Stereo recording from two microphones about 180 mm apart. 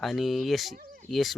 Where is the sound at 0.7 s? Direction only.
45° right (ahead or behind).